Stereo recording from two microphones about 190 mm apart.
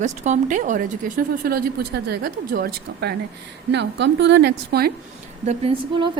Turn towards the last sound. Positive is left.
turn(degrees=-30)  # may be behind; listen again after turning